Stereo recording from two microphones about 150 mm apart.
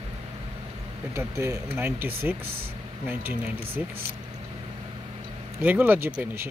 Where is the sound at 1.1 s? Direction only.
20° right (ahead or behind).